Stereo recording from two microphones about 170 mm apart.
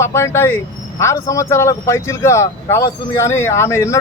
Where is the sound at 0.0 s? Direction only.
15° left (ahead or behind).